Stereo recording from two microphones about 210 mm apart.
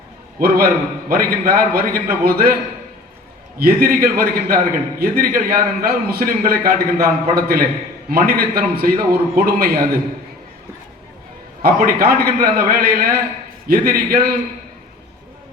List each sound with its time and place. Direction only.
0.3 s a man's voice: 45° right (ahead or behind)
3.6 s a man's voice: 45° right (ahead or behind)
11.6 s a man's voice: 45° right (ahead or behind)